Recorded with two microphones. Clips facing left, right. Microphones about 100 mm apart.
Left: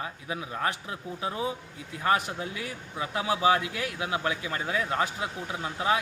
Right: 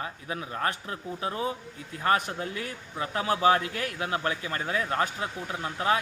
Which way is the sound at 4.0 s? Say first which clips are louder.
Even; 10° left (ahead or behind).